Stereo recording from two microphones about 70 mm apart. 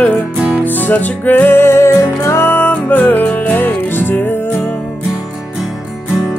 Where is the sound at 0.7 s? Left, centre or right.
Left.